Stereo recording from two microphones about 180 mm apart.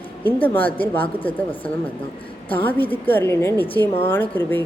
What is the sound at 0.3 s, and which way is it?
Speech, 10° left (ahead or behind).